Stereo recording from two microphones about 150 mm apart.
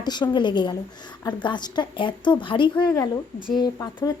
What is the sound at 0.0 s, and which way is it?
A woman's voice, 30° left (ahead or behind).